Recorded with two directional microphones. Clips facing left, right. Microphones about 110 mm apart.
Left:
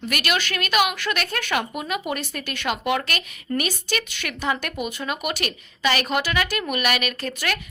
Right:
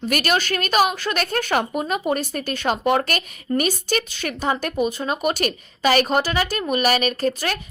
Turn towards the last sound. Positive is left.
turn(degrees=-35)  # may be behind; listen again after turning